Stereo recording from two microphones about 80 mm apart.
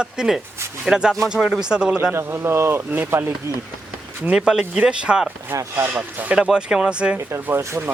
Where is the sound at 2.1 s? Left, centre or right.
Right.